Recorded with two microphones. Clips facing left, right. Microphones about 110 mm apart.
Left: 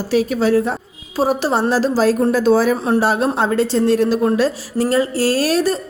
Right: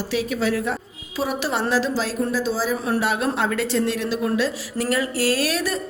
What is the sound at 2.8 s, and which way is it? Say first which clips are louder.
A woman's voice: left 6 dB; 35° left (ahead or behind).